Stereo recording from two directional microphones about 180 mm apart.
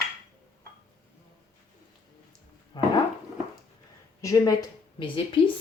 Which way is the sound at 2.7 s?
25° left (ahead or behind).